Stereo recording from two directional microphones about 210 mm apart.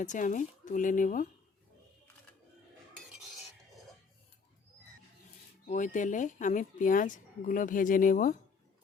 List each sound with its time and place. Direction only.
0.0 s speech: 35° left (ahead or behind)
5.7 s speech: 35° left (ahead or behind)